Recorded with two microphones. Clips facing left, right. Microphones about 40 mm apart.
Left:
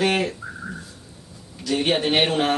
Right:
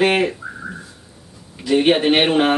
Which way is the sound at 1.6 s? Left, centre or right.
Right.